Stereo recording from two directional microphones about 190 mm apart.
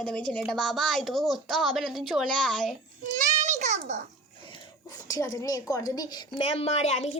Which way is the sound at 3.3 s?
40° right (ahead or behind).